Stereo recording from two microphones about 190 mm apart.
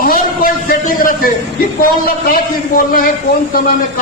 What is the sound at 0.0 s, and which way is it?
A man's voice, 45° left (ahead or behind).